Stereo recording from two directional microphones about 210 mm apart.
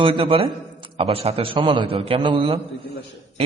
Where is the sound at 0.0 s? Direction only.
25° right (ahead or behind).